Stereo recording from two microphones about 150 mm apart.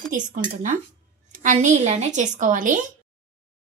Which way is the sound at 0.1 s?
60° right (ahead or behind).